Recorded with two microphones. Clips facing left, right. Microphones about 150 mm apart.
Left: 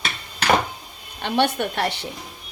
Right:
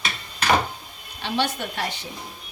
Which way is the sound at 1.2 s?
55° left (ahead or behind).